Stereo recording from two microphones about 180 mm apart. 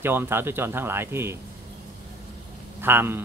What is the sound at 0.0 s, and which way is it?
Speech, 10° right (ahead or behind).